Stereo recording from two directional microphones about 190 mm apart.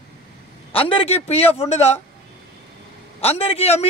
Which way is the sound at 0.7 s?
30° left (ahead or behind).